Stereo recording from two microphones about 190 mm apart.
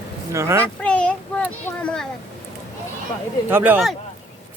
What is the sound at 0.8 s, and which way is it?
Child singing, 5° left (ahead or behind).